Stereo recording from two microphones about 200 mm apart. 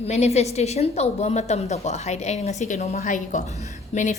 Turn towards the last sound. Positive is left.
turn(degrees=35)  # may be behind; listen again after turning